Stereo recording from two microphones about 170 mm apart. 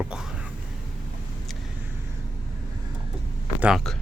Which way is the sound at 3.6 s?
5° right (ahead or behind).